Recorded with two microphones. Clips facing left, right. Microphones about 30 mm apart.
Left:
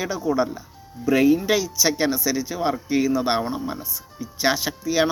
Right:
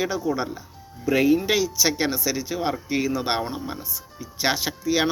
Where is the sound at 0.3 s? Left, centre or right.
Centre.